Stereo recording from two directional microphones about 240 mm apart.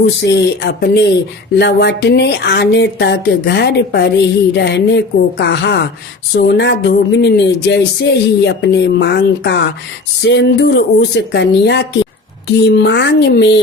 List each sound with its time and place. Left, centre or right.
0.2 s speech: left